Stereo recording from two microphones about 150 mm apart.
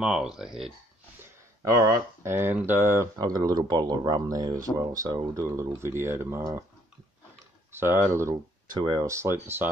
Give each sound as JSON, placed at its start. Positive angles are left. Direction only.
{"t": 0.0, "sound": "speech", "side_deg": -5}
{"t": 1.7, "sound": "speech", "side_deg": -20}
{"t": 7.7, "sound": "speech", "side_deg": -15}
{"t": 8.7, "sound": "speech", "side_deg": -30}